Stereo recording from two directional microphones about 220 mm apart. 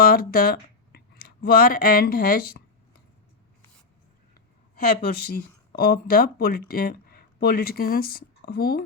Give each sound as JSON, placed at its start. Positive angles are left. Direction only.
{"t": 0.0, "sound": "speech", "side_deg": 40}
{"t": 4.8, "sound": "speech", "side_deg": 45}